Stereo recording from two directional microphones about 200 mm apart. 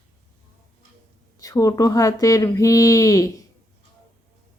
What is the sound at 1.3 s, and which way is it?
Speech, 15° left (ahead or behind).